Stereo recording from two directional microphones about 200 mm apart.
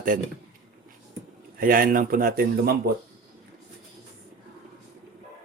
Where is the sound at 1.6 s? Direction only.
45° right (ahead or behind).